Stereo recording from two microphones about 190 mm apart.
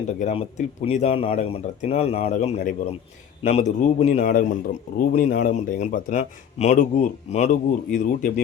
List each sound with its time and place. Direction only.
0.2 s speech: 35° left (ahead or behind)